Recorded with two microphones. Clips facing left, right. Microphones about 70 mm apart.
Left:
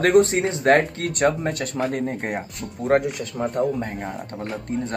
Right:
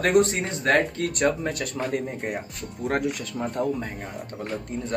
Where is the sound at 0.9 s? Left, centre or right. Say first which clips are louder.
Left 2 dB; left.